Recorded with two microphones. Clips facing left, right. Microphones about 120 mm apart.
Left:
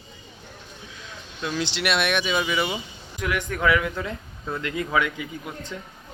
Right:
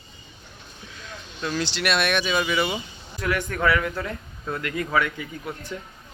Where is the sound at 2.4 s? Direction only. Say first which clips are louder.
Right 1 dB; 5° left (ahead or behind).